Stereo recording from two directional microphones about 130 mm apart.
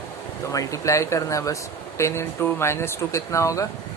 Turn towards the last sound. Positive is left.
turn(degrees=25)  # may be behind; listen again after turning